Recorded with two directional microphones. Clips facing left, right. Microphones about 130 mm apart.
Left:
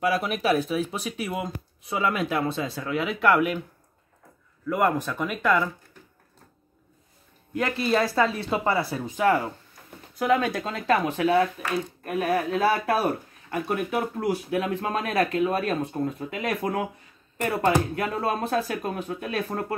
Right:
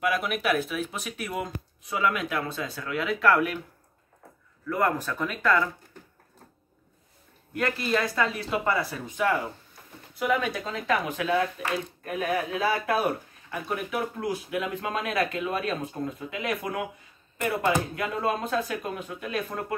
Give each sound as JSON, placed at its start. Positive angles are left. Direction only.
{"t": 0.0, "sound": "speech", "side_deg": 35}
{"t": 4.6, "sound": "speech", "side_deg": 15}
{"t": 7.5, "sound": "speech", "side_deg": 25}
{"t": 12.0, "sound": "speech", "side_deg": 45}
{"t": 13.5, "sound": "speech", "side_deg": 50}